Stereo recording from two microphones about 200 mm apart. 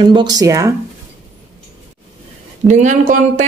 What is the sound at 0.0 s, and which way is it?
Speech, 25° right (ahead or behind).